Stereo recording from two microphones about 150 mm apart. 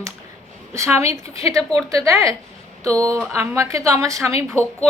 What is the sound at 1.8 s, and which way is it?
A woman's voice, 20° right (ahead or behind).